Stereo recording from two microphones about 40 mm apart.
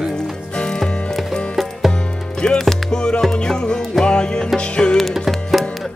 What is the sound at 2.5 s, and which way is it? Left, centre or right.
Music, centre.